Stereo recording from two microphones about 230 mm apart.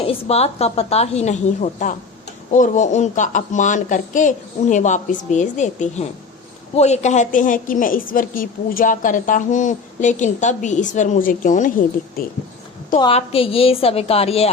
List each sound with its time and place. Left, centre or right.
0.0 s a woman's voice: left
13.0 s a woman's voice: left